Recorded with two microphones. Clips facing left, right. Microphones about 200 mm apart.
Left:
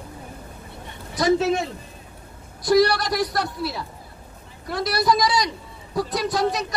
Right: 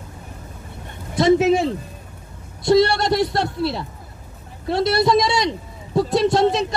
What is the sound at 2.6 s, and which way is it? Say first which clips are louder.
A man's voice: right 2 dB; 25° right (ahead or behind).